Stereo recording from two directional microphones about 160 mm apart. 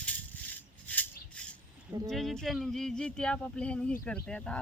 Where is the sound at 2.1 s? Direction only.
Centre (ahead or behind).